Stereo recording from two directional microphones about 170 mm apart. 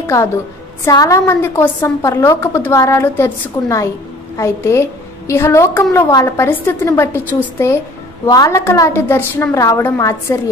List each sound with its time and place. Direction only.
0.0 s a woman's voice: 15° left (ahead or behind)